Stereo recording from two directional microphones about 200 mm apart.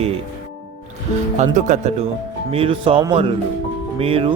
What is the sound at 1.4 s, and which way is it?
Speech, 40° right (ahead or behind).